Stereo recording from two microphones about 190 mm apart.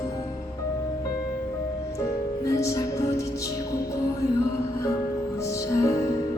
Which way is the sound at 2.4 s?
15° left (ahead or behind).